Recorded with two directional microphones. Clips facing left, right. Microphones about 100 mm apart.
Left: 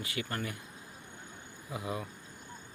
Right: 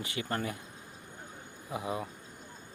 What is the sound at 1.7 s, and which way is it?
Speech, 25° right (ahead or behind).